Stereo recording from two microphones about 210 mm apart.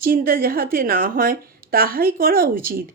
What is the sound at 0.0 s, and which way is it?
Speech, 45° right (ahead or behind).